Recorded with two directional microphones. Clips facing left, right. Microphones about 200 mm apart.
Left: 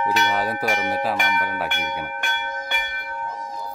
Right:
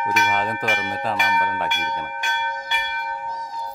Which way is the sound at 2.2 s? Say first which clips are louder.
Right 1 dB; 55° left (ahead or behind).